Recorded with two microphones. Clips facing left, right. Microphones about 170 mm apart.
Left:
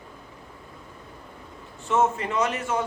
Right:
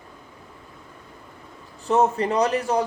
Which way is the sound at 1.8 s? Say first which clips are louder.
Right 3 dB; 35° right (ahead or behind).